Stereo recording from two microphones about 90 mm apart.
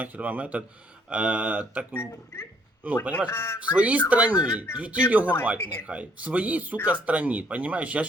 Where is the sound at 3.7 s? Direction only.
15° right (ahead or behind).